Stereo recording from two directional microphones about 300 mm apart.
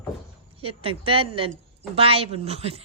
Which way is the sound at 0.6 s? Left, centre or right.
Centre.